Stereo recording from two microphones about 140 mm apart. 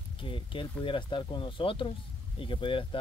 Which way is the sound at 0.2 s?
40° left (ahead or behind).